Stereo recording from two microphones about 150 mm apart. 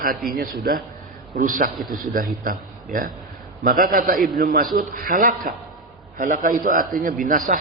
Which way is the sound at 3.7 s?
90° right.